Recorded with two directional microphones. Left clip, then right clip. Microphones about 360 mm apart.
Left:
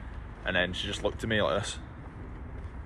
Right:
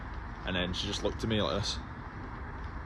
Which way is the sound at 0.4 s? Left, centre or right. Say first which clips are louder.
Left 6 dB; centre.